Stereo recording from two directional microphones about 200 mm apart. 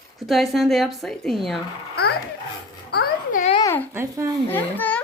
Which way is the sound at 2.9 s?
50° left (ahead or behind).